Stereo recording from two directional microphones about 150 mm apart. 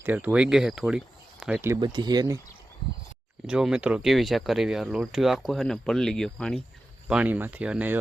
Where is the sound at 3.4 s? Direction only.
5° right (ahead or behind).